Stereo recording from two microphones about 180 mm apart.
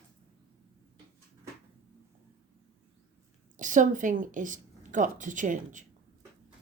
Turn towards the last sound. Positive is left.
turn(degrees=-45)  # may be behind; listen again after turning